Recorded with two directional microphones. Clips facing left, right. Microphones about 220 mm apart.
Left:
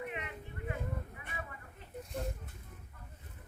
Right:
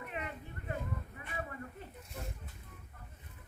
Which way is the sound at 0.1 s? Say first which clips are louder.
Even; 40° right (ahead or behind).